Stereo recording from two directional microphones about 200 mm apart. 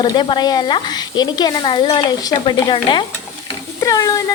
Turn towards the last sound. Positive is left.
turn(degrees=15)  # may be behind; listen again after turning